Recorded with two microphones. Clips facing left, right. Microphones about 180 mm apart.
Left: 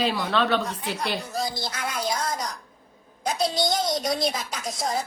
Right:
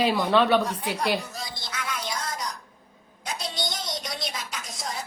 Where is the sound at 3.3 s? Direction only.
35° left (ahead or behind).